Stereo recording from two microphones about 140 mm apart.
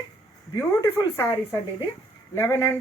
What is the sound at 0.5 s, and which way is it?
Speech, 20° left (ahead or behind).